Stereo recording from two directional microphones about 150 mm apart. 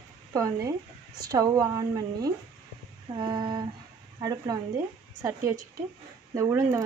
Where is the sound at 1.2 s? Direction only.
25° right (ahead or behind).